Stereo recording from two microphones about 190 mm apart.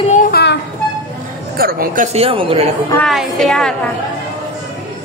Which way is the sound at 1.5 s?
50° right (ahead or behind).